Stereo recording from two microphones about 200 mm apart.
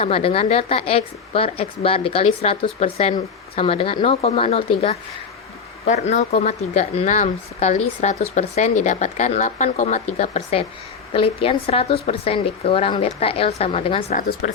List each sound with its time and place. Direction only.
0.0 s a woman's voice: 30° left (ahead or behind)